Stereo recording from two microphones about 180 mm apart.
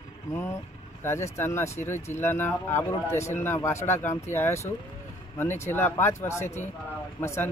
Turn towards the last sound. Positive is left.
turn(degrees=15)  # may be behind; listen again after turning